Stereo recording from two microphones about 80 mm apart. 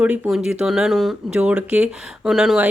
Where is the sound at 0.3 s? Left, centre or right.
Centre.